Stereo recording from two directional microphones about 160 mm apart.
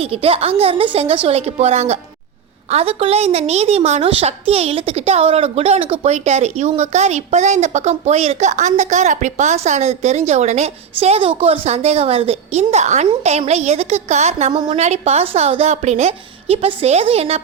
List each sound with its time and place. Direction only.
0.0 s a woman's voice: 35° right (ahead or behind)
14.5 s a woman's voice: 25° right (ahead or behind)
14.8 s a woman's voice: 45° right (ahead or behind)